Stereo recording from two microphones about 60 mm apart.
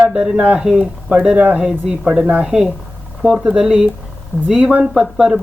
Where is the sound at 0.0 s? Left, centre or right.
Centre.